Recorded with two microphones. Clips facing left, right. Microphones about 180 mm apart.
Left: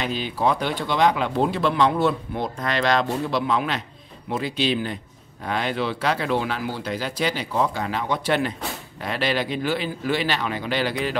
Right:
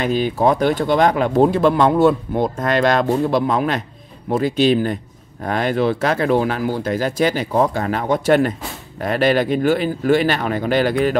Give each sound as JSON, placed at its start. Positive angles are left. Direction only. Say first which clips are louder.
{"t": 0.0, "sound": "speech", "louder": "right 7 dB", "side_deg": -50}